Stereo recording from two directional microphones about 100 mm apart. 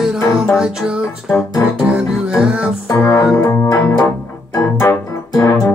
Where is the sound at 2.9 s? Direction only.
30° left (ahead or behind).